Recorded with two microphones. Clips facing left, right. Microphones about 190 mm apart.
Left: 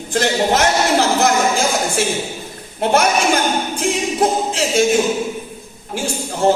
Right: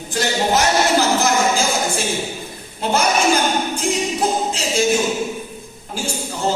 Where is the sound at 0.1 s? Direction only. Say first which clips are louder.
Left 3 dB; 65° left (ahead or behind).